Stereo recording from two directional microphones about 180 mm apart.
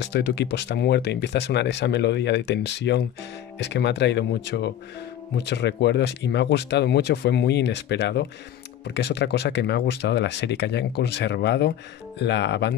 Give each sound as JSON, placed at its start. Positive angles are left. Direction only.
{"t": 0.0, "sound": "speech", "side_deg": 70}